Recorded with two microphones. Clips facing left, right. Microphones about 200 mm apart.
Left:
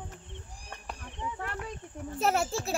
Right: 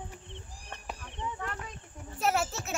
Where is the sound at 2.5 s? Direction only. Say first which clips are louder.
Left 4 dB; 35° left (ahead or behind).